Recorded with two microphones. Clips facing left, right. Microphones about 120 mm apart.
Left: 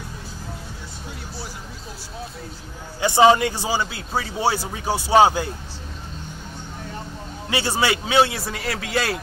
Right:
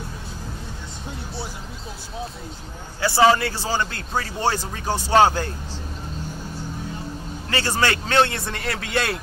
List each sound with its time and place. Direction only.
3.0 s speech: 20° left (ahead or behind)
7.4 s a man's voice: 15° left (ahead or behind)